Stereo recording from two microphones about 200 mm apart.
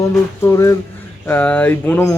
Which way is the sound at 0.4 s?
15° left (ahead or behind).